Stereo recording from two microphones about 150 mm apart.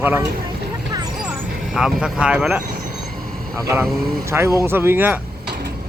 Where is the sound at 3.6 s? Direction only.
20° right (ahead or behind).